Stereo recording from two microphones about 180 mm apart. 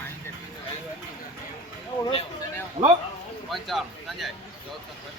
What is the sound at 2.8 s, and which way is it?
Speech, 30° right (ahead or behind).